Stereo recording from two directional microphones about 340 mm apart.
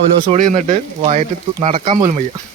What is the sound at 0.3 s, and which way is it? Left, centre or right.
Speech, right.